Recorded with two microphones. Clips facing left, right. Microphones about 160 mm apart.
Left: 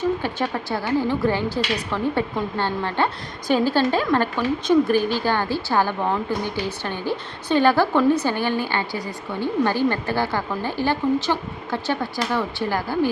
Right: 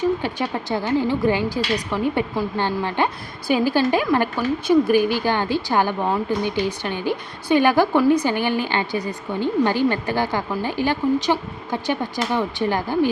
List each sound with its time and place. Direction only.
0.2 s a woman's voice: 15° right (ahead or behind)